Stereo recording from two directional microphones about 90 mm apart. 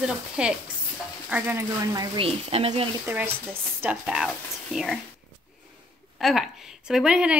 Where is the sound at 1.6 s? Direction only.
35° right (ahead or behind).